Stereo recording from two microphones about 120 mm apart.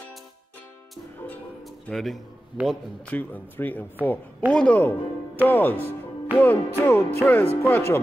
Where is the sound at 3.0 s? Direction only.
10° left (ahead or behind).